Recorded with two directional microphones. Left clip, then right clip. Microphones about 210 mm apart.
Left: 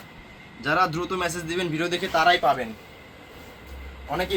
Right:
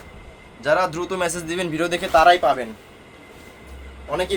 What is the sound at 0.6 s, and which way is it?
Speech, 55° right (ahead or behind).